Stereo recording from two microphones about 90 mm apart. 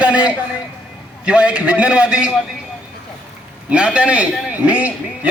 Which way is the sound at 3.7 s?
15° right (ahead or behind).